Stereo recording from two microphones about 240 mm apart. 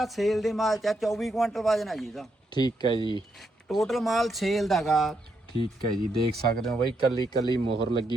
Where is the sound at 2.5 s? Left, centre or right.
Centre.